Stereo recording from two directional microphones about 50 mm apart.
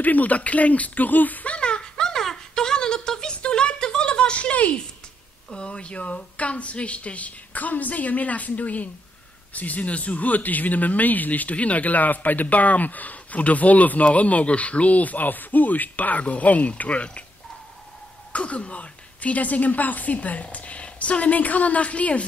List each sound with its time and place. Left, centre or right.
0.0 s a sound: left
5.5 s speech: left
18.3 s a woman's voice: left